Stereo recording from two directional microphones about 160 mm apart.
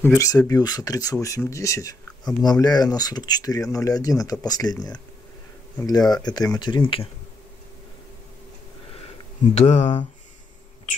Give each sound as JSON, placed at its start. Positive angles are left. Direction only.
{"t": 0.0, "sound": "speech", "side_deg": 15}
{"t": 9.5, "sound": "speech", "side_deg": 45}